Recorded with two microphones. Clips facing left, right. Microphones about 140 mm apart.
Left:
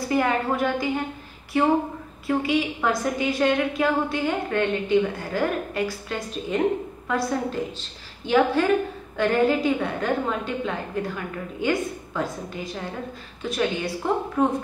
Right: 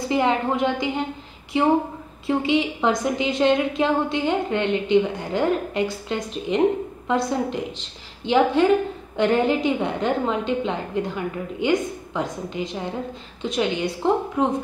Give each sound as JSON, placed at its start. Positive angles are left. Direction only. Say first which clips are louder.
{"t": 0.1, "sound": "a woman's voice", "louder": "right 2 dB", "side_deg": -20}